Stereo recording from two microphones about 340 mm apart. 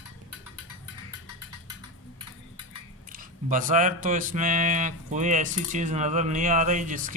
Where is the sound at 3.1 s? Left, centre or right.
Right.